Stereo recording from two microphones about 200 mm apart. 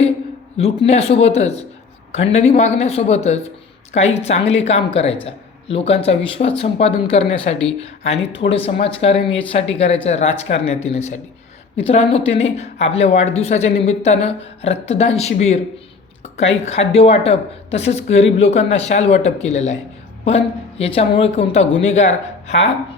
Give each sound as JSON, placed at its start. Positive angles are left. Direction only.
{"t": 0.5, "sound": "a man's voice", "side_deg": 30}